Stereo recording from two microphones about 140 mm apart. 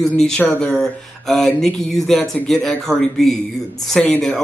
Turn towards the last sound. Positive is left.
turn(degrees=10)  # may be behind; listen again after turning